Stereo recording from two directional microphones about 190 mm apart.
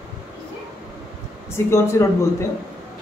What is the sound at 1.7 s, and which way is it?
Speech, 15° left (ahead or behind).